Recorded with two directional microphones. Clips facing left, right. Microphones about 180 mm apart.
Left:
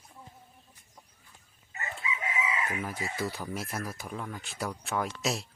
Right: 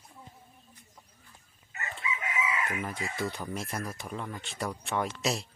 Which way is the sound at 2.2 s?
25° left (ahead or behind).